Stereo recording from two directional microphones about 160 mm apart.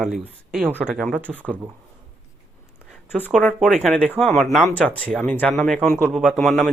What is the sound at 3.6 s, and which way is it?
Speech, centre (ahead or behind).